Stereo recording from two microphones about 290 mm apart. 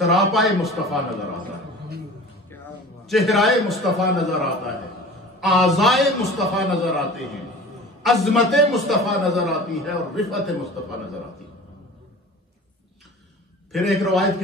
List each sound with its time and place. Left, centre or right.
0.1 s a man's voice: centre
3.1 s a man's voice: centre
8.0 s a man's voice: centre
13.7 s a man's voice: centre